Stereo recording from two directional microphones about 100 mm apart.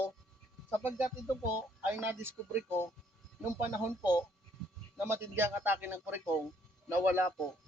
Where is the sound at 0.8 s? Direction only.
25° right (ahead or behind).